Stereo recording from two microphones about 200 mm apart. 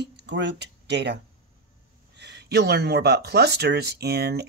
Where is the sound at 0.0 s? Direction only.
60° right (ahead or behind).